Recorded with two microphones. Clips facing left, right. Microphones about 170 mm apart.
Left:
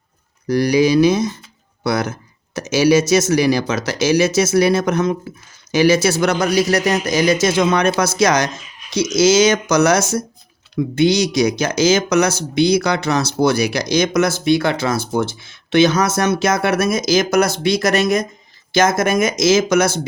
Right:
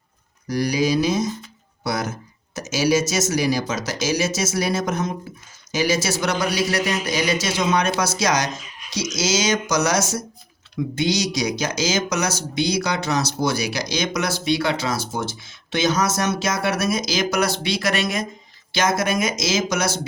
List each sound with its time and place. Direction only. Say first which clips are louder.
0.4 s a man's voice: left 6 dB; 65° left (ahead or behind)